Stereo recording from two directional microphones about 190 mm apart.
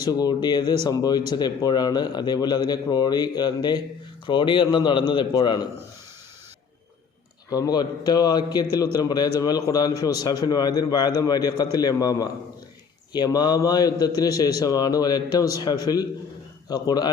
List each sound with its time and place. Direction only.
0.0 s a man's voice: 20° left (ahead or behind)
7.5 s a man's voice: 20° left (ahead or behind)